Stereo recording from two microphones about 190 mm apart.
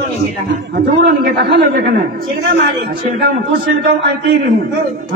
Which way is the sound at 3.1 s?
55° right (ahead or behind).